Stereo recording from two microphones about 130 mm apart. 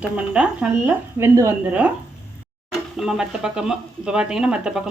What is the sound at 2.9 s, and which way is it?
Speech, 5° right (ahead or behind).